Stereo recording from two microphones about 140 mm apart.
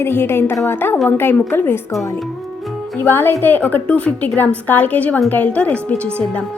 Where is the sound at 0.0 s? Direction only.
15° left (ahead or behind).